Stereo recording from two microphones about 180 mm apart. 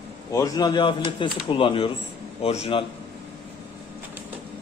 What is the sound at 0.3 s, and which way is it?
A man's voice, 20° left (ahead or behind).